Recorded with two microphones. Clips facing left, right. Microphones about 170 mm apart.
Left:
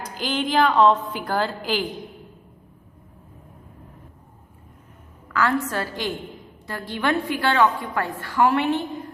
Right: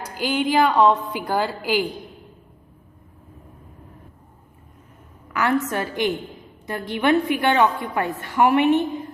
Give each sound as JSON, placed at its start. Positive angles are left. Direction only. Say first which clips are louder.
{"t": 0.0, "sound": "a woman's voice", "louder": "right 3 dB", "side_deg": -10}
{"t": 5.3, "sound": "a woman's voice", "louder": "right 1 dB", "side_deg": -15}